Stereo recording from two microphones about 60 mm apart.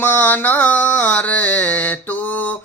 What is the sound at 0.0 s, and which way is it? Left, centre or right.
Mantra, left.